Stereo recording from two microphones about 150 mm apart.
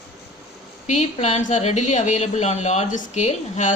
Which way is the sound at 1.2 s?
50° left (ahead or behind).